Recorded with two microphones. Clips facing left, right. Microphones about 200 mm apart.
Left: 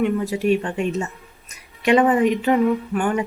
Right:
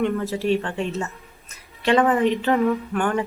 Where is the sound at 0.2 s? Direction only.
15° left (ahead or behind).